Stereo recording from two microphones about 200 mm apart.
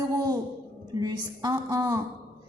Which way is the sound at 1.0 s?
20° right (ahead or behind).